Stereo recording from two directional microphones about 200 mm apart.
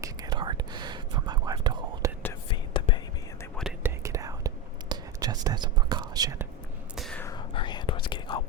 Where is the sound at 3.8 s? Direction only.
15° right (ahead or behind).